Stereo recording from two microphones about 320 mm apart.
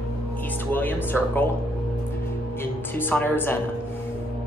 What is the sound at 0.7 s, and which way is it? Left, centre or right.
Speech, centre.